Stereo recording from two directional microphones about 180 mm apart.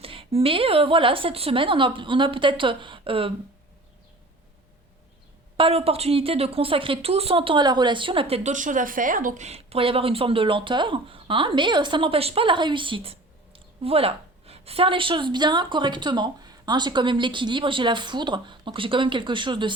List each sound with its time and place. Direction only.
0.0 s a woman's voice: 30° right (ahead or behind)
5.5 s a woman's voice: 30° right (ahead or behind)